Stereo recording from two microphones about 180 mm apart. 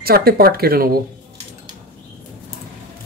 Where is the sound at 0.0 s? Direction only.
60° right (ahead or behind).